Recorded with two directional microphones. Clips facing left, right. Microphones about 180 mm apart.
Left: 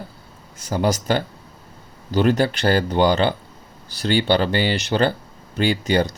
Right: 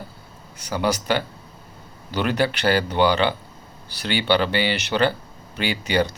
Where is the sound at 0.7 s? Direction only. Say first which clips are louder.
Left 2 dB; 40° left (ahead or behind).